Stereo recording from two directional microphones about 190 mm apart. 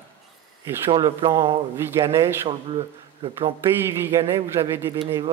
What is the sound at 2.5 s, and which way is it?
Speech, 30° right (ahead or behind).